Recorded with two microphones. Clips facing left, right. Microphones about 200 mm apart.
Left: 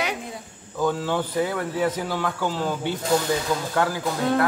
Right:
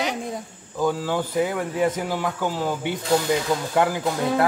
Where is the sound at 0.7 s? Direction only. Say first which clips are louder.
Even; 10° right (ahead or behind).